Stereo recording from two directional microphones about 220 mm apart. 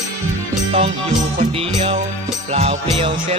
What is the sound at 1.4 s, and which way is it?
Music, 25° right (ahead or behind).